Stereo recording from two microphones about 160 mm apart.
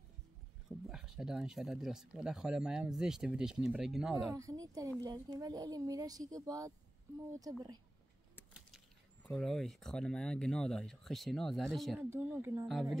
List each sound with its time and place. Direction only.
0.7 s speech: 5° right (ahead or behind)
4.3 s speech: 20° right (ahead or behind)
8.5 s speech: centre (ahead or behind)
12.0 s speech: 10° right (ahead or behind)